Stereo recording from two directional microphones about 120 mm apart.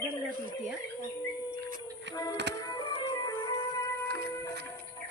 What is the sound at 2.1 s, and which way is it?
Music, 30° left (ahead or behind).